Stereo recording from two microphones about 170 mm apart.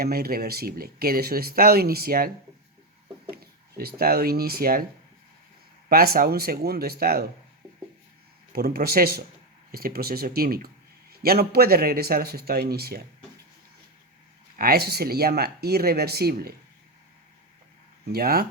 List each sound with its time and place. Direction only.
0.0 s speech: 60° right (ahead or behind)
3.3 s speech: 65° right (ahead or behind)
5.9 s speech: 60° right (ahead or behind)
8.5 s speech: 65° right (ahead or behind)
14.5 s speech: 65° right (ahead or behind)
18.1 s speech: 65° right (ahead or behind)